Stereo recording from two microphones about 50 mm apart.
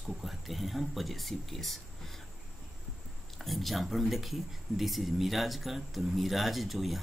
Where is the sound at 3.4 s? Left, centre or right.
Centre.